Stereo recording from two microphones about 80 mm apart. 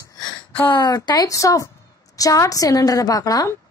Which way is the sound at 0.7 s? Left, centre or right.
Left.